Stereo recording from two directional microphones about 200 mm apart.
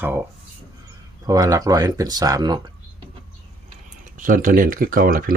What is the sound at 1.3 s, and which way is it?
Speech, 15° right (ahead or behind).